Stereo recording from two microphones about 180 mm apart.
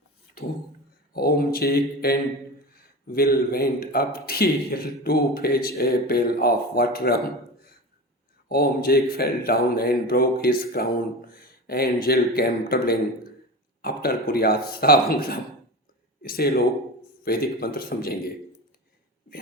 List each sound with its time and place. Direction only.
1.1 s speech: 55° left (ahead or behind)
8.4 s a man's voice: 55° left (ahead or behind)